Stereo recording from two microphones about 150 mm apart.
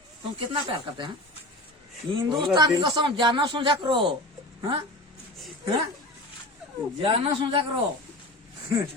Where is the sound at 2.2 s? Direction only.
30° right (ahead or behind).